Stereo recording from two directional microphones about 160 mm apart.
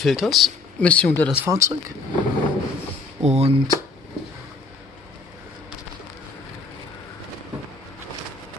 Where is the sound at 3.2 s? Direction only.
40° right (ahead or behind).